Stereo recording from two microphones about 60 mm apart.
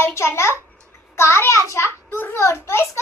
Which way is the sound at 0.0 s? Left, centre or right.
Left.